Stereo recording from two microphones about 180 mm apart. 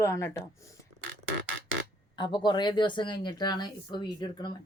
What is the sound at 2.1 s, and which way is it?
Speech, 25° left (ahead or behind).